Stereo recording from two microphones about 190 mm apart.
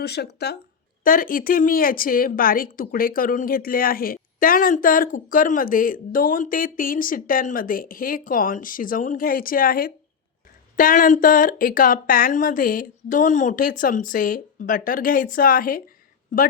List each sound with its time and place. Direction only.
0.0 s speech: 60° left (ahead or behind)
1.0 s a woman's voice: 50° left (ahead or behind)